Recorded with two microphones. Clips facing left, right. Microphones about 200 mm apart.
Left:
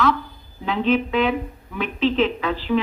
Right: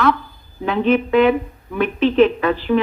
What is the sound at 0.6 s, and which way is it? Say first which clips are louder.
Speech: right 3 dB; 55° right (ahead or behind).